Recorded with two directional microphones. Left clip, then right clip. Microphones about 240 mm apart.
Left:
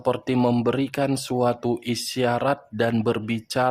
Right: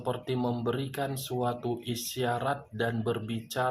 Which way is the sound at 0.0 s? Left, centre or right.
Left.